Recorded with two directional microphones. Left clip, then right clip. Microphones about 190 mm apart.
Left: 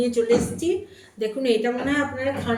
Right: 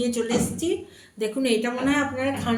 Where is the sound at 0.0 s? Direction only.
70° right (ahead or behind).